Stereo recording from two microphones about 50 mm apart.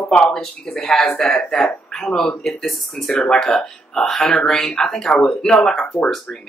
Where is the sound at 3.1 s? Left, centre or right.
Centre.